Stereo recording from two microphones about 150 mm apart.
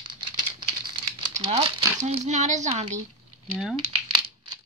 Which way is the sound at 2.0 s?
50° right (ahead or behind).